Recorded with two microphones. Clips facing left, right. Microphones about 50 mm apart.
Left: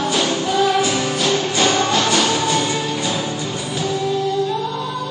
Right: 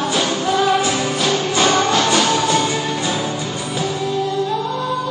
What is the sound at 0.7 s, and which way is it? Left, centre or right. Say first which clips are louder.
Music: right 1 dB; right.